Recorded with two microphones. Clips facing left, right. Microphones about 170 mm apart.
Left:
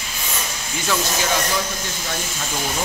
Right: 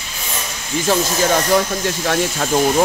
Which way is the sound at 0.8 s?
50° right (ahead or behind).